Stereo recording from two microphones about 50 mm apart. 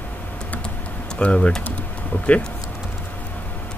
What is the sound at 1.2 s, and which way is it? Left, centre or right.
Speech, left.